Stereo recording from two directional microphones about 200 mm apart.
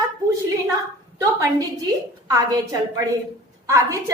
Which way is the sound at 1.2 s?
15° right (ahead or behind).